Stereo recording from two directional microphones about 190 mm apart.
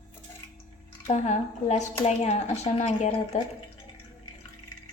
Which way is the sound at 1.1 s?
35° left (ahead or behind).